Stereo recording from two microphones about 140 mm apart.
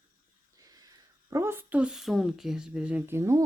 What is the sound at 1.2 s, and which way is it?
Speech, 20° right (ahead or behind).